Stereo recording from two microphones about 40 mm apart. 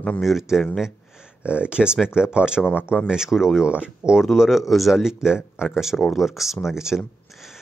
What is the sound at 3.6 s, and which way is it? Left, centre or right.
Speech, right.